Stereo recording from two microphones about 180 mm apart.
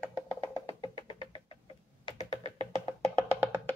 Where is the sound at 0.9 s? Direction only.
30° left (ahead or behind).